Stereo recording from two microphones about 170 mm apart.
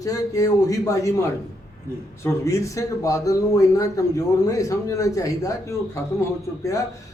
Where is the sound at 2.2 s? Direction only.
20° left (ahead or behind).